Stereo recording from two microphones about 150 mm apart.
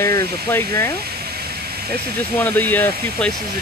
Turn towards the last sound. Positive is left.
turn(degrees=10)  # may be behind; listen again after turning